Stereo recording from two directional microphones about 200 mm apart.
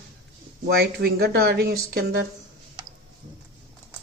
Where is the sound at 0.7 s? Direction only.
50° right (ahead or behind).